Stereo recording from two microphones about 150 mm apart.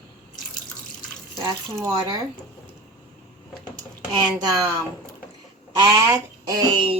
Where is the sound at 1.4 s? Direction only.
25° right (ahead or behind).